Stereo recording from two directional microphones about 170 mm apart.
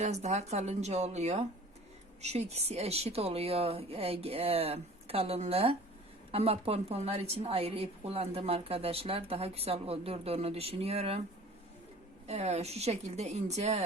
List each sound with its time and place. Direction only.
0.0 s a woman's voice: 40° right (ahead or behind)
12.3 s a woman's voice: 40° right (ahead or behind)